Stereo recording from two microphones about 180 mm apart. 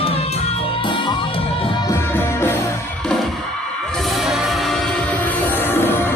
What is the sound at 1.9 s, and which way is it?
Music, 15° left (ahead or behind).